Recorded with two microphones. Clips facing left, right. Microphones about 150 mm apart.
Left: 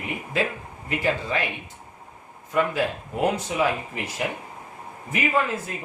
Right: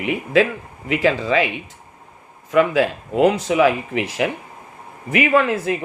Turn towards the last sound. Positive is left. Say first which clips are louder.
# right 7 dB
turn(degrees=-80)